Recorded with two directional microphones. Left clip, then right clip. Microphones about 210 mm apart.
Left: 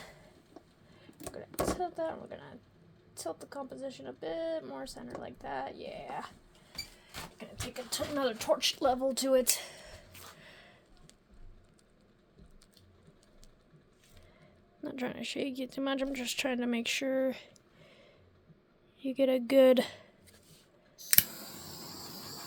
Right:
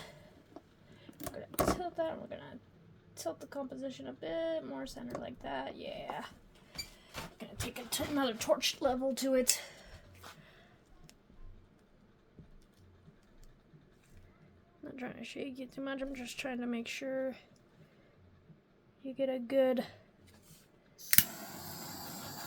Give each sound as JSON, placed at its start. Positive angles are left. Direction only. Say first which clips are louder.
{"t": 1.8, "sound": "speech", "louder": "left 1 dB", "side_deg": 25}
{"t": 7.9, "sound": "speech", "louder": "left 2 dB", "side_deg": 15}
{"t": 10.4, "sound": "a sound", "louder": "left 6 dB", "side_deg": 35}
{"t": 14.8, "sound": "speech", "louder": "left 7 dB", "side_deg": 35}
{"t": 19.0, "sound": "speech", "louder": "left 7 dB", "side_deg": 40}
{"t": 21.0, "sound": "camera", "louder": "left 1 dB", "side_deg": 0}